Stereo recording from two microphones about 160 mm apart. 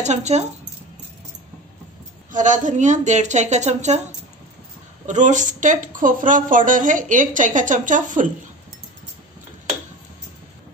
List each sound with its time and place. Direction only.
0.0 s a woman's voice: 45° right (ahead or behind)
2.3 s a woman's voice: 50° right (ahead or behind)
5.0 s a woman's voice: 50° right (ahead or behind)